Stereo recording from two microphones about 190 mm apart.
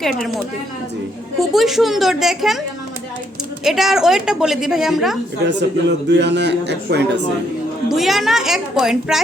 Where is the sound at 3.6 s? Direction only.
Centre (ahead or behind).